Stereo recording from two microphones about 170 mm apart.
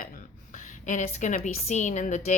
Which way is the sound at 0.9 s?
45° left (ahead or behind).